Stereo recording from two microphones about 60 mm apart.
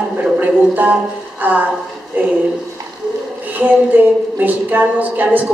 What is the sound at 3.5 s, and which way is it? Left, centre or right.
Speech, right.